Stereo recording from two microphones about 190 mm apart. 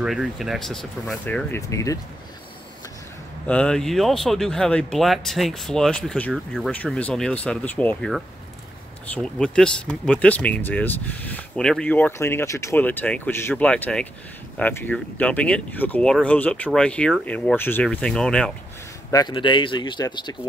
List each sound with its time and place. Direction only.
0.0 s speech: centre (ahead or behind); by 2.0 s 15° left (ahead or behind)
3.4 s speech: 5° left (ahead or behind)
19.0 s speech: 20° left (ahead or behind)